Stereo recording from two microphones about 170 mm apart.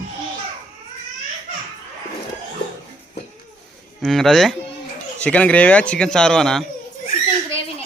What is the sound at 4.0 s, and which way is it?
A man's voice, centre (ahead or behind).